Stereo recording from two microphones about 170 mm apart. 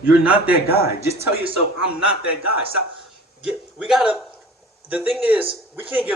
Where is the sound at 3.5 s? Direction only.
5° right (ahead or behind).